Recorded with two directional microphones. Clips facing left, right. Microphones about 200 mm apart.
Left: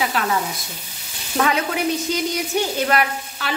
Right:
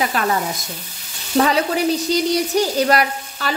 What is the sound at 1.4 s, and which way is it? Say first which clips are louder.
Speech: right 4 dB; 35° right (ahead or behind).